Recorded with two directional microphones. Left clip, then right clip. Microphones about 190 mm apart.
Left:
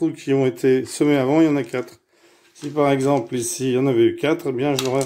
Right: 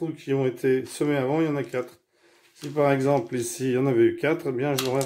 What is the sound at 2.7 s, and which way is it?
Speech, 25° left (ahead or behind).